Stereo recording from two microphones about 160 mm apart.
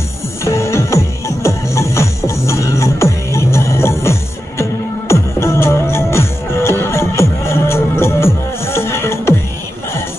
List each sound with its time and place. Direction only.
0.4 s music: 15° left (ahead or behind)